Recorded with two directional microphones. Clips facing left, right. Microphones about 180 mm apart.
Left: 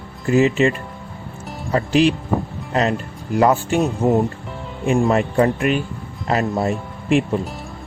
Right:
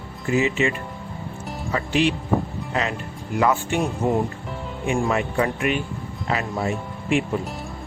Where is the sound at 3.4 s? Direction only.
40° left (ahead or behind).